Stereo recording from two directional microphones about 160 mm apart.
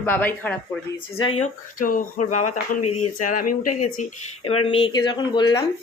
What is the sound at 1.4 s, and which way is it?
Speech, 55° left (ahead or behind).